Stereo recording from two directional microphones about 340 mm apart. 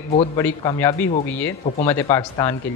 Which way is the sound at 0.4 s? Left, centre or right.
Centre.